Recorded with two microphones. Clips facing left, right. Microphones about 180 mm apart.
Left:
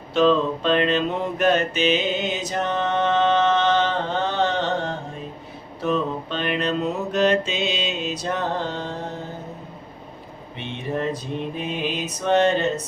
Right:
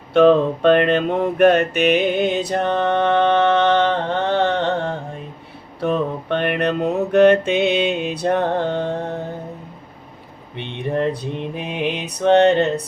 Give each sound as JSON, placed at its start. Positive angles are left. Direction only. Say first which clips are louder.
{"t": 0.1, "sound": "mantra", "louder": "right 5 dB", "side_deg": -60}
{"t": 10.6, "sound": "mantra", "louder": "right 5 dB", "side_deg": -60}